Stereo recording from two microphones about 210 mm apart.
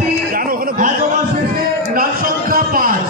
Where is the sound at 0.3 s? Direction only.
45° right (ahead or behind).